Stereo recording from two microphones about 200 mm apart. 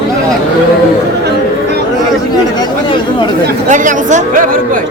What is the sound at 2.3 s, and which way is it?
Chatter, 20° left (ahead or behind).